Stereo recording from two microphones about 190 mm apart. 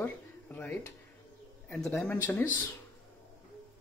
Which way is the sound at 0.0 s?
10° left (ahead or behind).